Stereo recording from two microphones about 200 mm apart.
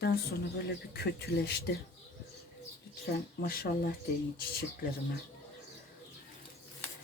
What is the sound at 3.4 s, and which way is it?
Speech, 50° left (ahead or behind).